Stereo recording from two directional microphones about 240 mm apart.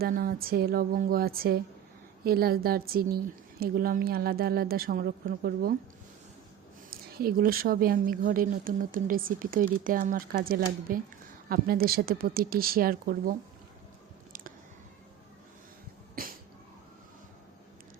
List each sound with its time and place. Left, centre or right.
0.0 s a woman's voice: right
6.9 s a woman's voice: right